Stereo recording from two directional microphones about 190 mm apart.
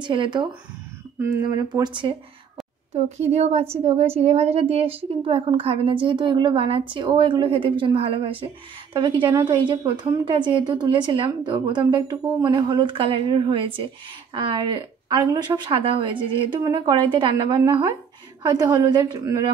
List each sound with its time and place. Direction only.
0.0 s a woman's voice: 25° right (ahead or behind)